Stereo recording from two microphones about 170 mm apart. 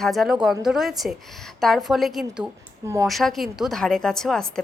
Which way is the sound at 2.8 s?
15° right (ahead or behind).